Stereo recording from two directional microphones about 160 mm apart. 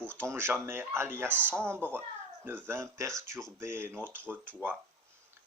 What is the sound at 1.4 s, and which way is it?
Speech, 10° left (ahead or behind).